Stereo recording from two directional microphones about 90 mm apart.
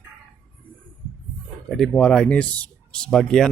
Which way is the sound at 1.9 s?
10° left (ahead or behind).